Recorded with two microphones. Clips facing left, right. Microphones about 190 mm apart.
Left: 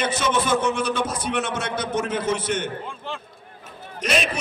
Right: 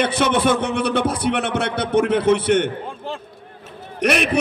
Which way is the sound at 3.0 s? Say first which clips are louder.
Right 4 dB; 40° right (ahead or behind).